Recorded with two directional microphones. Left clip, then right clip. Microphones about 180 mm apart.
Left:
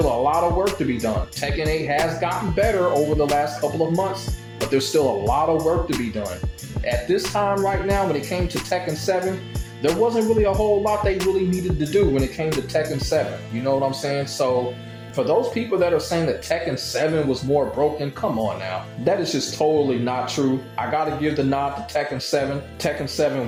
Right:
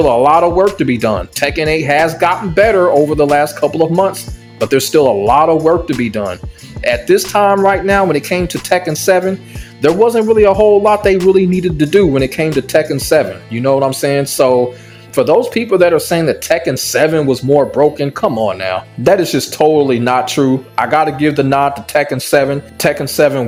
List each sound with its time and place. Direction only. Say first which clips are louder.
0.0 s speech: right 10 dB; 50° right (ahead or behind)
7.3 s speech: right 12 dB; 50° right (ahead or behind)